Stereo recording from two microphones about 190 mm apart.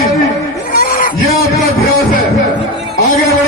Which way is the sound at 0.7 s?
45° left (ahead or behind).